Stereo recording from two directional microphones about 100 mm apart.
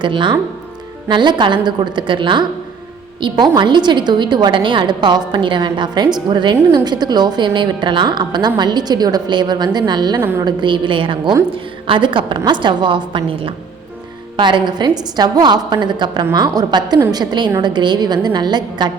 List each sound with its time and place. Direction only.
0.0 s a woman's voice: 55° right (ahead or behind)
10.2 s a woman's voice: 20° right (ahead or behind)
10.4 s a woman's voice: 50° right (ahead or behind)
14.3 s a woman's voice: 50° right (ahead or behind)